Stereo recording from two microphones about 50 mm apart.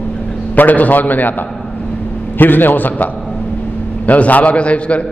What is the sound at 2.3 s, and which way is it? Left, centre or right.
A man's voice, left.